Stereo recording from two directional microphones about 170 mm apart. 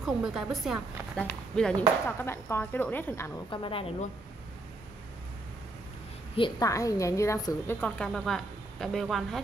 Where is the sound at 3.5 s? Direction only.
30° left (ahead or behind).